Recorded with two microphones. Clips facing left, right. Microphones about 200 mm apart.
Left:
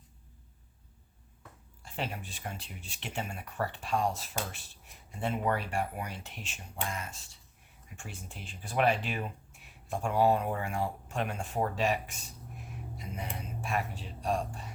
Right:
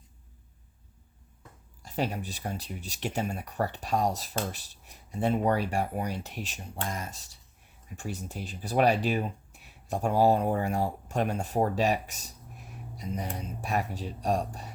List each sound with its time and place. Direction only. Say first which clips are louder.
1.8 s speech: right 7 dB; 40° right (ahead or behind)